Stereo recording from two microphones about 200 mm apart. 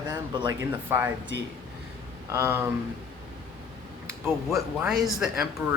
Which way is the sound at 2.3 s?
15° right (ahead or behind).